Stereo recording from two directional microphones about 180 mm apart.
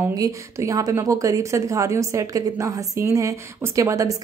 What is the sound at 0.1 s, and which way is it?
A woman's voice, 20° right (ahead or behind).